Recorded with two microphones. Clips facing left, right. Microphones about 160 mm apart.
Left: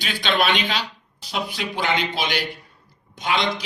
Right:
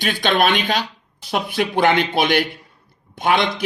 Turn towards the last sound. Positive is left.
turn(degrees=-55)  # may be behind; listen again after turning